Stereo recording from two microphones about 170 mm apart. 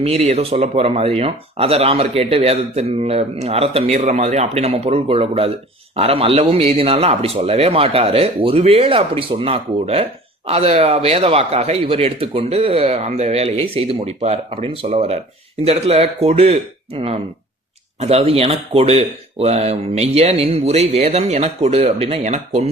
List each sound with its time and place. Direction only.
0.0 s speech: 40° right (ahead or behind)